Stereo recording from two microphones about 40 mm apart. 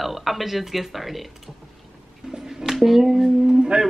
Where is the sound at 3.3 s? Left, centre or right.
Right.